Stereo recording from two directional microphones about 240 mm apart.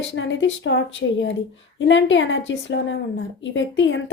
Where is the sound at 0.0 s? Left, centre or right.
Left.